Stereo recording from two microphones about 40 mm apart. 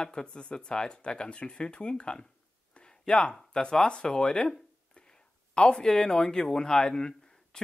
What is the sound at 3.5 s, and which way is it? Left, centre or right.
Speech, centre.